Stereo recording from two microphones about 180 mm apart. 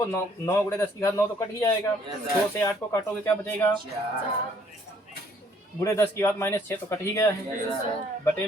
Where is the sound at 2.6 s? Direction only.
15° left (ahead or behind).